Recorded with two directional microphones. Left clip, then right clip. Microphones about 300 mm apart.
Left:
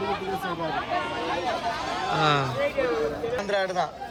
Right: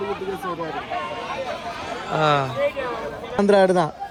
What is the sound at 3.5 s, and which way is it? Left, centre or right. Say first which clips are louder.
Speech: right 10 dB; right.